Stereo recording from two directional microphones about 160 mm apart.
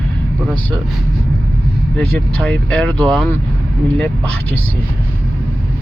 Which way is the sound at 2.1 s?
5° left (ahead or behind).